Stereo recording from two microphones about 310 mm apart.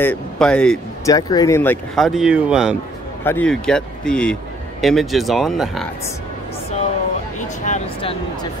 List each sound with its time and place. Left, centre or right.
0.0 s speech: centre
7.6 s speech: left